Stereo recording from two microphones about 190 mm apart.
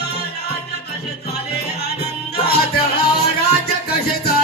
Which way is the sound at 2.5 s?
55° left (ahead or behind).